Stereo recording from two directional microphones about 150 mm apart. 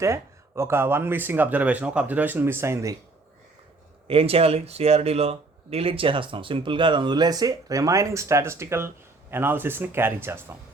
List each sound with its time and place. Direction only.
0.0 s speech: 20° right (ahead or behind)
4.0 s speech: 40° right (ahead or behind); by 10.4 s 15° right (ahead or behind)